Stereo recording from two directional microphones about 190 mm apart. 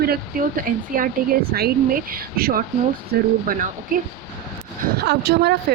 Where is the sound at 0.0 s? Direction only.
50° right (ahead or behind).